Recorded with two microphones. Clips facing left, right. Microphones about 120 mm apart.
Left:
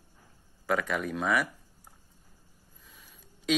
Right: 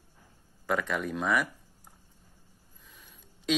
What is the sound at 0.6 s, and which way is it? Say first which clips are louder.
Mantra: left 1 dB; 5° left (ahead or behind).